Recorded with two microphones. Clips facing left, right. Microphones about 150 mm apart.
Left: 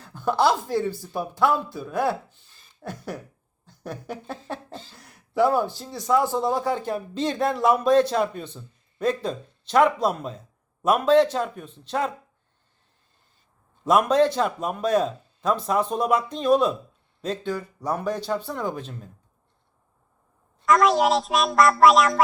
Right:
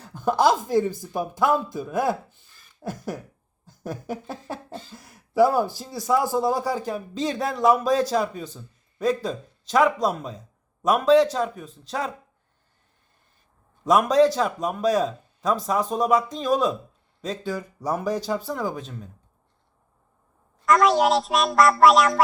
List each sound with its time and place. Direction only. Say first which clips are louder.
0.0 s a woman's voice: right 1 dB; 15° right (ahead or behind)
4.9 s speech: right 2 dB; 40° right (ahead or behind)
5.3 s speech: right 2 dB; 10° right (ahead or behind)
6.8 s a man's voice: left 1 dB; centre (ahead or behind)
13.8 s a man's voice: right 1 dB; centre (ahead or behind)
20.7 s a man's voice: even; centre (ahead or behind)